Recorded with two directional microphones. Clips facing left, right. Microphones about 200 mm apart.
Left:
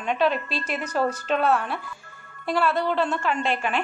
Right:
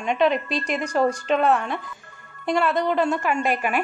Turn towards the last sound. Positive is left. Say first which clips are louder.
# right 2 dB
turn(degrees=-10)  # may be behind; listen again after turning